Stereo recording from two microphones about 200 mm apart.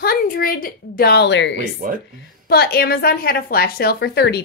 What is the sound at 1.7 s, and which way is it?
Speech, 45° right (ahead or behind).